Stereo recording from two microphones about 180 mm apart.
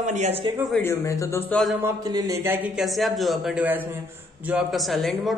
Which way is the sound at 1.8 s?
15° right (ahead or behind).